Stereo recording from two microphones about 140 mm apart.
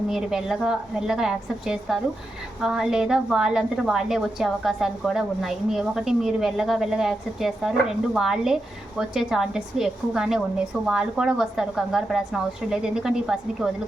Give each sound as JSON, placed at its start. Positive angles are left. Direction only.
{"t": 0.1, "sound": "a woman's voice", "side_deg": -5}